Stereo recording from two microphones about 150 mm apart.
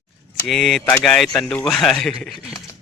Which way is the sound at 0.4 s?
Centre (ahead or behind).